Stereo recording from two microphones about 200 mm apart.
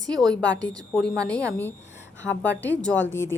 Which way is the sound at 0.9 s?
5° left (ahead or behind).